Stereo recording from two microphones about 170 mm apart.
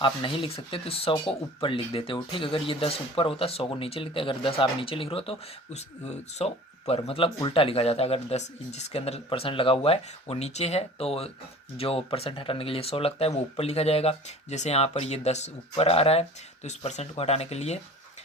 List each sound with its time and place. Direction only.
0.0 s speech: 30° left (ahead or behind)